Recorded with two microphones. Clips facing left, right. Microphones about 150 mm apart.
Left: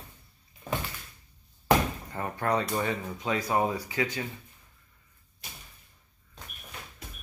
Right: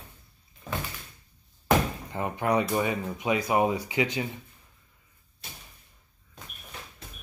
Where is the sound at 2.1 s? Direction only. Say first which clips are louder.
Right 3 dB; 15° right (ahead or behind).